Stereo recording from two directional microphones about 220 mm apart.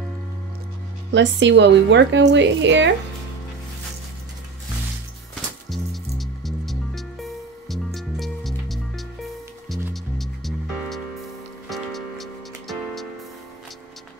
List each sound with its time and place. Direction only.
1.1 s speech: 55° right (ahead or behind)
5.7 s music: centre (ahead or behind)